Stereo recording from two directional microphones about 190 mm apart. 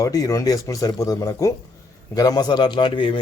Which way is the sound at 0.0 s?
20° left (ahead or behind).